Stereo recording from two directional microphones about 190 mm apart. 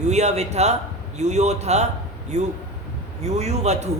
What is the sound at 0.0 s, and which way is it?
A man's voice, 35° right (ahead or behind).